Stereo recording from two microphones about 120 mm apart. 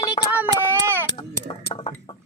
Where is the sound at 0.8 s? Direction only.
20° right (ahead or behind).